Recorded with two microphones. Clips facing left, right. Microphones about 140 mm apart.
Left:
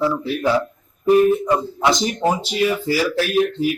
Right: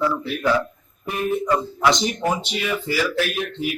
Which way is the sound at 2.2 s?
35° left (ahead or behind).